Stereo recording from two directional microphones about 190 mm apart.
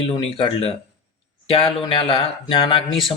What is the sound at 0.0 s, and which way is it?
Speech, 30° left (ahead or behind).